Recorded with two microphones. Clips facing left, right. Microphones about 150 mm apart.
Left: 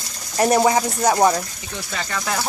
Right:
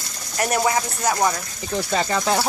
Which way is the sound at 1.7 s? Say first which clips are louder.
Right 7 dB; 35° right (ahead or behind).